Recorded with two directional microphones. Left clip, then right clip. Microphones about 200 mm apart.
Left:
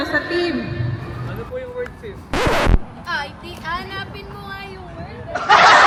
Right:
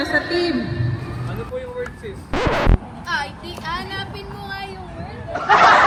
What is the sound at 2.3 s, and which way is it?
Music, centre (ahead or behind).